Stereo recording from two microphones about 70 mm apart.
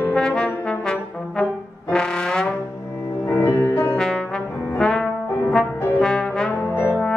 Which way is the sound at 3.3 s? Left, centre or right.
Left.